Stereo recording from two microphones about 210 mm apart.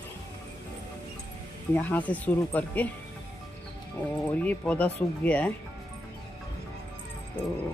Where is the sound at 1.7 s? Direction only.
5° left (ahead or behind).